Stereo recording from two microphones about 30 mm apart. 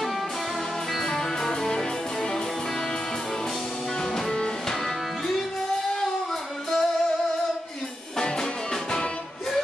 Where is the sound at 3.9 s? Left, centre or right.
Left.